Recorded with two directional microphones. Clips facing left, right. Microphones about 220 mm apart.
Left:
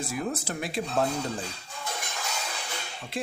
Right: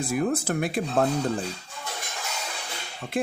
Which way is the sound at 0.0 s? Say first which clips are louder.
Right 6 dB; 55° right (ahead or behind).